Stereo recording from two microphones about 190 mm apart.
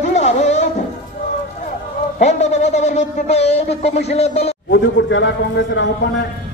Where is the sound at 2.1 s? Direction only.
35° left (ahead or behind).